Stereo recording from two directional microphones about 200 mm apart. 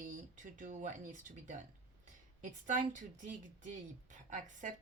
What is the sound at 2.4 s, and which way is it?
Speech, 40° right (ahead or behind).